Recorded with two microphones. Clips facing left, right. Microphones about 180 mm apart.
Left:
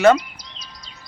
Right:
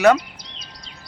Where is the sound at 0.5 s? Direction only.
55° right (ahead or behind).